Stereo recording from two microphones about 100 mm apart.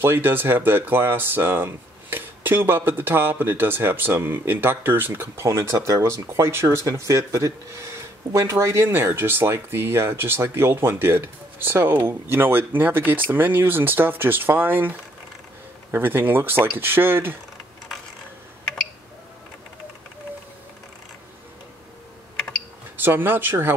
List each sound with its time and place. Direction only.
0.0 s speech: 20° right (ahead or behind)
22.9 s speech: 20° right (ahead or behind)